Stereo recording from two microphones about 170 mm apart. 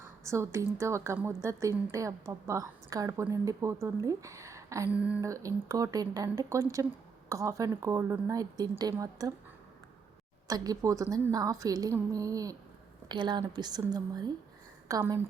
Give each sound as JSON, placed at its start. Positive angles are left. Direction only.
{"t": 0.0, "sound": "a woman's voice", "side_deg": -15}
{"t": 4.9, "sound": "a woman's voice", "side_deg": -5}
{"t": 5.2, "sound": "a woman's voice", "side_deg": -20}
{"t": 10.4, "sound": "a woman's voice", "side_deg": -20}